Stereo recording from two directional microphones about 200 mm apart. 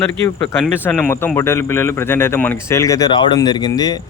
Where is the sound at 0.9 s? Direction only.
10° left (ahead or behind).